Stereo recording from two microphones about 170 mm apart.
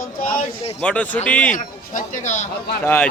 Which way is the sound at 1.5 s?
50° left (ahead or behind).